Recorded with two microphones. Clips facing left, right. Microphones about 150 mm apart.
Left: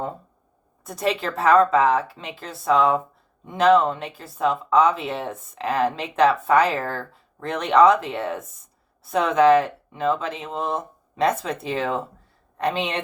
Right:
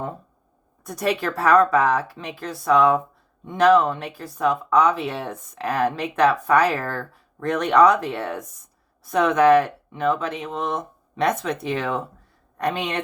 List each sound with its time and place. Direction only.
0.9 s speech: 25° left (ahead or behind)